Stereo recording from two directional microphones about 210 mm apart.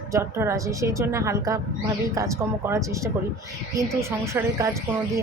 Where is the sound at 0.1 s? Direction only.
15° right (ahead or behind).